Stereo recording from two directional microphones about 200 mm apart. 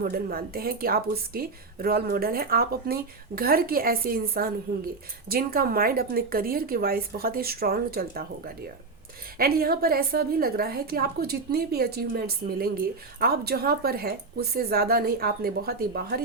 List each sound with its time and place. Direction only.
0.0 s a woman's voice: 50° right (ahead or behind)